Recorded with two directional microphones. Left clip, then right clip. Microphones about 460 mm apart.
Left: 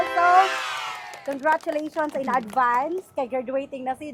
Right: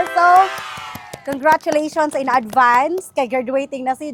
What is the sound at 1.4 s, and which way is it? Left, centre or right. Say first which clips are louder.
A woman's voice: right 8 dB; right.